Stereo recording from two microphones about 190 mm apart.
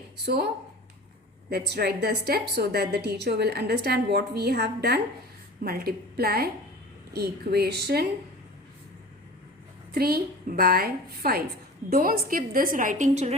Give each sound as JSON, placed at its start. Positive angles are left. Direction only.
{"t": 1.5, "sound": "a woman's voice", "side_deg": -55}
{"t": 9.9, "sound": "a woman's voice", "side_deg": -55}